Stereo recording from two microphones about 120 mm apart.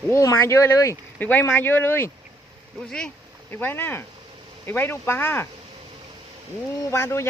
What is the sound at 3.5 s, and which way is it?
Speech, 20° left (ahead or behind).